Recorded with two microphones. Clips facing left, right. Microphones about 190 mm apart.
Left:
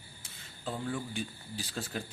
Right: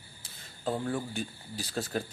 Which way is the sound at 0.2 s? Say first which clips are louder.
Right 1 dB; 45° right (ahead or behind).